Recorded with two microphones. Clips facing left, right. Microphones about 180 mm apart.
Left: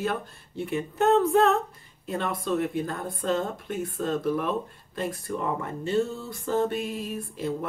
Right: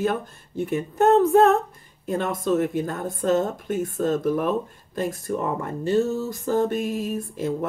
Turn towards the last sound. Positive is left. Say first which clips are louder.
# right 5 dB
turn(degrees=-45)  # may be behind; listen again after turning